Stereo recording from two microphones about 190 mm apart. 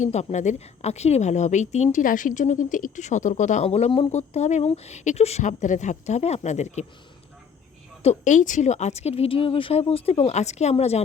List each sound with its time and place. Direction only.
0.0 s speech: 35° left (ahead or behind)
8.0 s speech: 40° left (ahead or behind)